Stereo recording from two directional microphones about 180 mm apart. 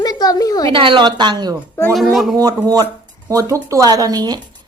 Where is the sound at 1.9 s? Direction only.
Centre (ahead or behind).